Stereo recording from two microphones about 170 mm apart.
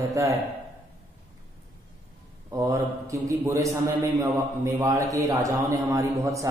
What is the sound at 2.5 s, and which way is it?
A man's voice, 20° right (ahead or behind).